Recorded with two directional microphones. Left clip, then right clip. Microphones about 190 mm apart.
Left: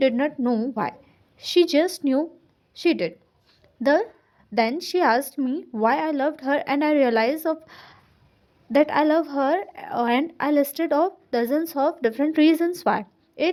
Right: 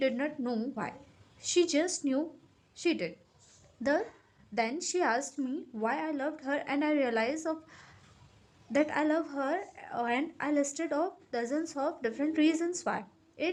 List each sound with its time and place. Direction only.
0.0 s a woman's voice: 40° left (ahead or behind)
4.5 s a woman's voice: 35° left (ahead or behind)